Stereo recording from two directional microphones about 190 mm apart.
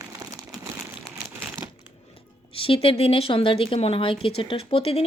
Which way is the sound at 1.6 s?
10° right (ahead or behind).